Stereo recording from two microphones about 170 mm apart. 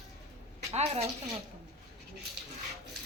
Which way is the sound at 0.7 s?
40° right (ahead or behind).